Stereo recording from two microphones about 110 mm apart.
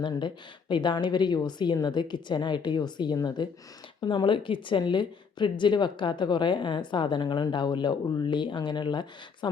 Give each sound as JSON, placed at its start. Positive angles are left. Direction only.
{"t": 0.7, "sound": "a woman's voice", "side_deg": 45}